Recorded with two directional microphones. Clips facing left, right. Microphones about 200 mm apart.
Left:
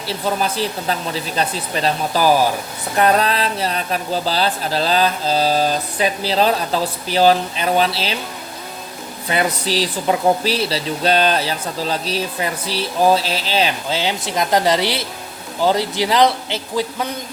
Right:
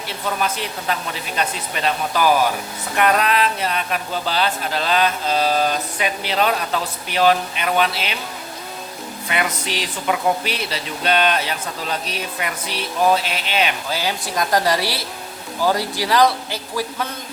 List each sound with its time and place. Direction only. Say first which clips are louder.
0.1 s speech: left 3 dB; 35° left (ahead or behind)
9.3 s speech: left 5 dB; 35° left (ahead or behind)